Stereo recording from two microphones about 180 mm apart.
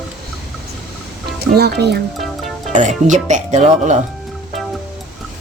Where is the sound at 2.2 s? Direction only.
Centre (ahead or behind).